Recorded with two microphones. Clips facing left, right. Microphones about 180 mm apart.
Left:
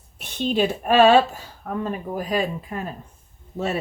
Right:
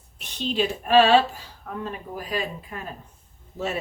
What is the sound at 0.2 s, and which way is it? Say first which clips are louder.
A woman's voice: left 4 dB; 50° left (ahead or behind).